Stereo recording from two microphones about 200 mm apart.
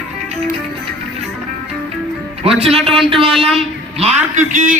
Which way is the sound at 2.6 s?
30° right (ahead or behind).